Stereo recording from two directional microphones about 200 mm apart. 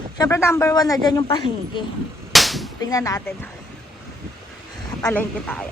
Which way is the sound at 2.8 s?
15° left (ahead or behind).